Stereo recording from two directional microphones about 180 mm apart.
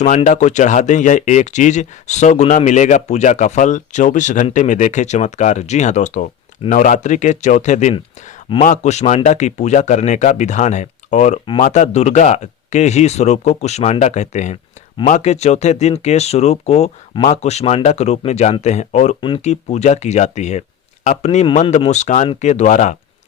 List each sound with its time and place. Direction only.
0.3 s speech: 40° left (ahead or behind)